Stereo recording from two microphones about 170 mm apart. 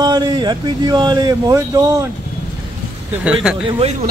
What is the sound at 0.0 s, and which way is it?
Speech, 25° right (ahead or behind).